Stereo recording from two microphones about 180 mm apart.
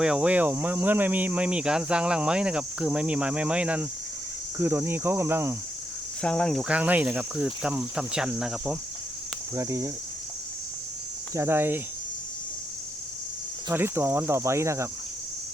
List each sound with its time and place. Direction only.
0.0 s speech: 5° right (ahead or behind)
6.2 s speech: 5° left (ahead or behind)
9.6 s speech: 15° right (ahead or behind)
11.3 s speech: 15° right (ahead or behind)
13.7 s speech: 15° right (ahead or behind)